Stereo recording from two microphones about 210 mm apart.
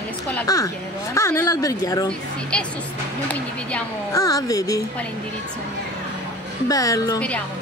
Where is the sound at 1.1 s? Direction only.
15° left (ahead or behind).